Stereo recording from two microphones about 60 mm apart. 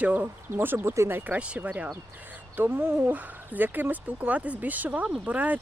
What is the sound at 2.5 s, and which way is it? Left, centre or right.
Speech, right.